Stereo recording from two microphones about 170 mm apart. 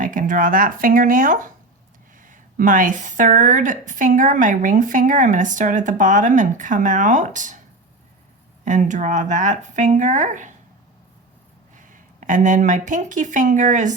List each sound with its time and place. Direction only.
0.0 s a woman's voice: 50° right (ahead or behind)
8.6 s a woman's voice: 45° right (ahead or behind)
11.8 s speech: 50° right (ahead or behind)